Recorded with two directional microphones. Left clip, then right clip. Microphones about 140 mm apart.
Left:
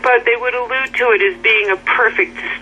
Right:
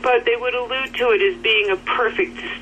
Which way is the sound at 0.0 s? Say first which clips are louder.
Left 4 dB; 25° left (ahead or behind).